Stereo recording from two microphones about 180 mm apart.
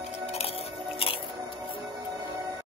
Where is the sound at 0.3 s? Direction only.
35° left (ahead or behind).